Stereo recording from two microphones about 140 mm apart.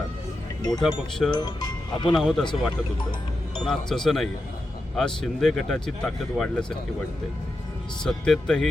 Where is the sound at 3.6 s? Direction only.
5° left (ahead or behind).